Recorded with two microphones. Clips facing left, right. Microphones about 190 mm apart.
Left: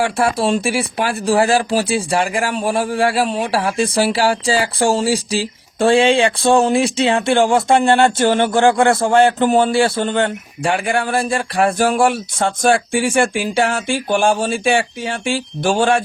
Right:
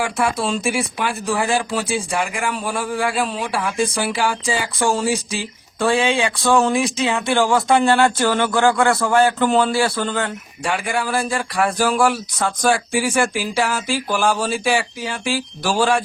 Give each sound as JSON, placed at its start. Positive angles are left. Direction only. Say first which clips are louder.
{"t": 0.0, "sound": "speech", "louder": "left 4 dB", "side_deg": 30}